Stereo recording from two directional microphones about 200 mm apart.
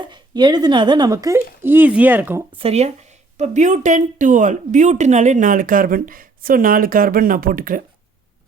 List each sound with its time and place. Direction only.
0.0 s a woman's voice: 20° right (ahead or behind)
2.6 s a woman's voice: 30° right (ahead or behind)